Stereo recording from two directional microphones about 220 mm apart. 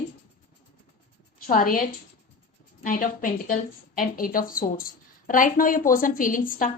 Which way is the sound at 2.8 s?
40° left (ahead or behind).